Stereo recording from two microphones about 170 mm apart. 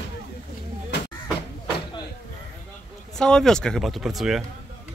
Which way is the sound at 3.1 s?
5° left (ahead or behind).